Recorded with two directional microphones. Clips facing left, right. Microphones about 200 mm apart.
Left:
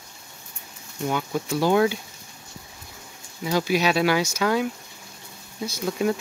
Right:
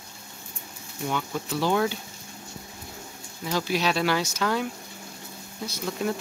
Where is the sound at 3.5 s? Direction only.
10° left (ahead or behind).